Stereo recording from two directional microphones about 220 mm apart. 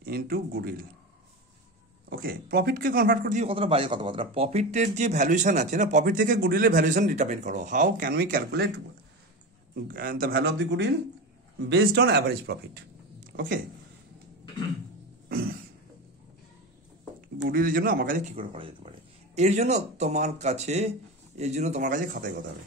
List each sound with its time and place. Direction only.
0.0 s a man's voice: 40° right (ahead or behind)
2.0 s a man's voice: 40° right (ahead or behind)
9.8 s speech: 40° right (ahead or behind)
17.5 s a man's voice: 40° right (ahead or behind)
18.3 s a man's voice: 25° right (ahead or behind)